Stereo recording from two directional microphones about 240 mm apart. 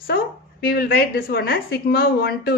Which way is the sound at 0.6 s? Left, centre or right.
Left.